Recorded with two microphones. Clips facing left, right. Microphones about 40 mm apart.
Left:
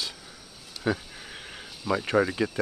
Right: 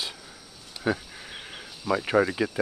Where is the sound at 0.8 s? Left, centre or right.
Centre.